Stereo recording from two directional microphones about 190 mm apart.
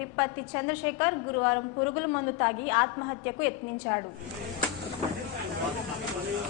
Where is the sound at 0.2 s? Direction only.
10° left (ahead or behind).